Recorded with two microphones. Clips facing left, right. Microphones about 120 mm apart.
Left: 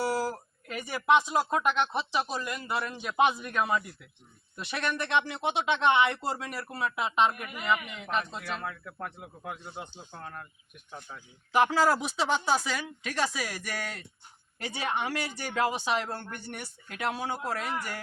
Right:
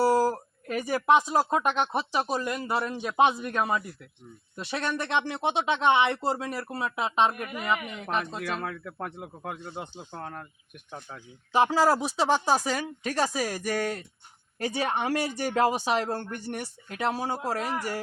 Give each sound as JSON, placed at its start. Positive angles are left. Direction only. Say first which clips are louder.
{"t": 0.0, "sound": "speech", "louder": "right 7 dB", "side_deg": -35}
{"t": 7.3, "sound": "speech", "louder": "right 1 dB", "side_deg": -40}
{"t": 8.6, "sound": "speech", "louder": "right 3 dB", "side_deg": -60}
{"t": 11.5, "sound": "speech", "louder": "right 2 dB", "side_deg": -30}